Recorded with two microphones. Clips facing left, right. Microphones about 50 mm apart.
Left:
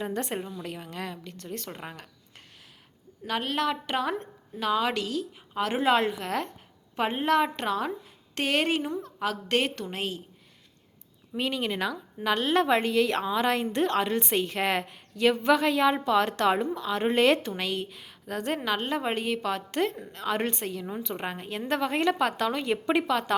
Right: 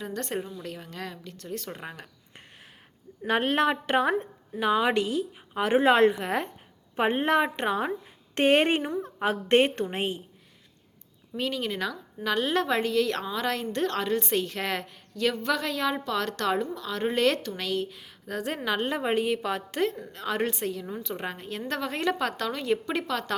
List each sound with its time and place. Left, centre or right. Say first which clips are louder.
0.0 s speech: left 3 dB; left
0.3 s a woman's voice: right 1 dB; centre
3.2 s a woman's voice: right 4 dB; right
11.3 s a woman's voice: left 1 dB; centre
17.7 s a woman's voice: right 2 dB; centre